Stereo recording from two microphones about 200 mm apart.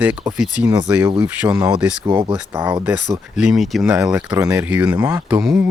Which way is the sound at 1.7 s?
5° right (ahead or behind).